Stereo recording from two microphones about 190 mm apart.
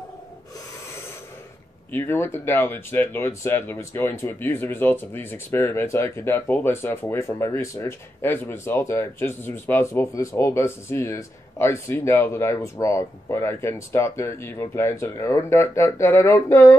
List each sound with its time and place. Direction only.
1.9 s speech: 10° left (ahead or behind)